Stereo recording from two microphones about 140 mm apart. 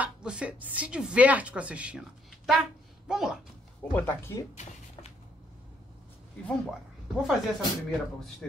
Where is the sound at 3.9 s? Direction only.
15° left (ahead or behind).